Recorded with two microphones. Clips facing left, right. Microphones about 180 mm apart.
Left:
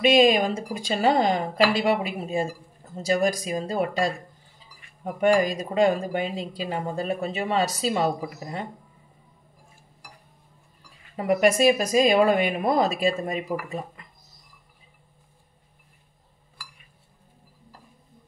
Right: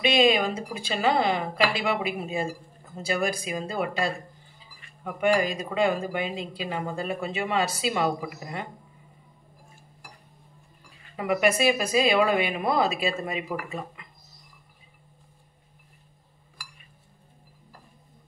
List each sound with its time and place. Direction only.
0.0 s speech: 45° left (ahead or behind)
11.1 s speech: 40° left (ahead or behind)